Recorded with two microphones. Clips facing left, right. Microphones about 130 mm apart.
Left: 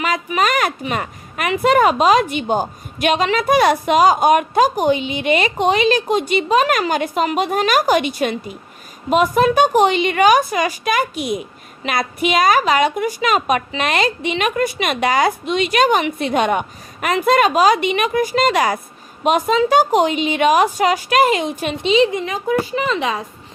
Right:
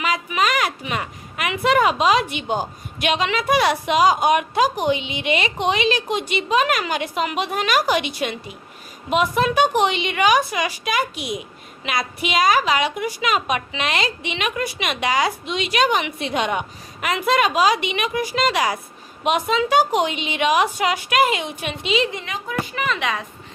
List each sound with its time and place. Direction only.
0.0 s speech: 45° left (ahead or behind)